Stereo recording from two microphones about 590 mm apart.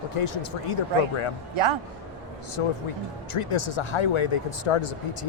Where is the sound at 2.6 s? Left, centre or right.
Left.